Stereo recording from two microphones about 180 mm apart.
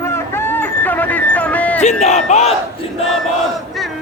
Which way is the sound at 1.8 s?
40° left (ahead or behind).